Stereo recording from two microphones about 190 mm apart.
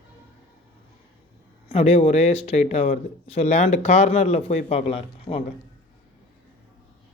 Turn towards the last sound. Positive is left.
turn(degrees=30)  # may be behind; listen again after turning